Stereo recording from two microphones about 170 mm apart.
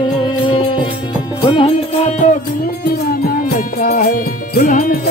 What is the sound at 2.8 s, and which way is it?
Music, 60° left (ahead or behind).